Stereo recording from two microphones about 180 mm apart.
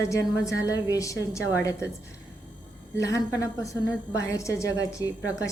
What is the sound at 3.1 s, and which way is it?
A woman's voice, 15° left (ahead or behind).